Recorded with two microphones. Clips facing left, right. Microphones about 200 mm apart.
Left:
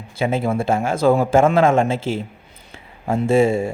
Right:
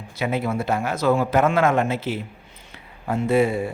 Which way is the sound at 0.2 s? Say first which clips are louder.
Left 4 dB; 25° left (ahead or behind).